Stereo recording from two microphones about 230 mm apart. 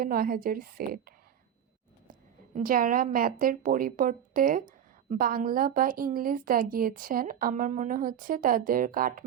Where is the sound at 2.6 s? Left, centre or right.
Right.